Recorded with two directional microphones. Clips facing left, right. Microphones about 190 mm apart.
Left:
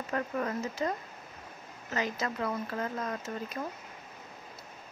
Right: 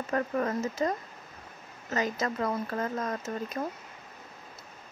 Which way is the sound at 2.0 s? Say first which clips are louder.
Right 3 dB; 45° right (ahead or behind).